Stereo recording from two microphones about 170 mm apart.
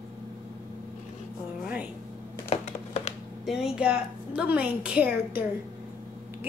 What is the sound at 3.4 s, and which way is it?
A woman's voice, 5° right (ahead or behind).